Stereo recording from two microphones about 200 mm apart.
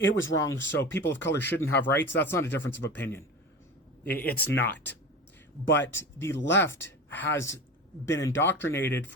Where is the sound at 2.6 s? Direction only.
65° left (ahead or behind).